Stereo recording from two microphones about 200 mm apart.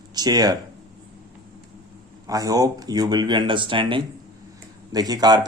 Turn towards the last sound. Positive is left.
turn(degrees=-20)  # may be behind; listen again after turning